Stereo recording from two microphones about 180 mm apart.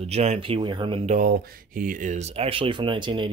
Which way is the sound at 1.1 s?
50° right (ahead or behind).